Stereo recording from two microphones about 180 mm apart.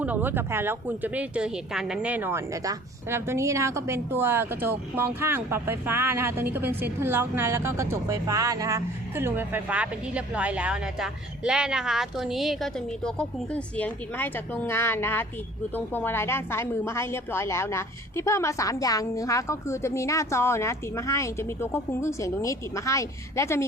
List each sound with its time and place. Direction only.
0.0 s a woman's voice: 10° right (ahead or behind); by 23.6 s 15° left (ahead or behind)